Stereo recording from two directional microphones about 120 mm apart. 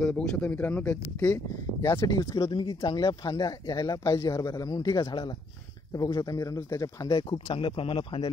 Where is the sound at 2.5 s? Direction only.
45° left (ahead or behind).